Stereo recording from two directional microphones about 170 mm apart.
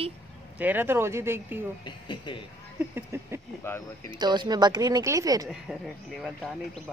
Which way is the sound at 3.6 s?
15° left (ahead or behind).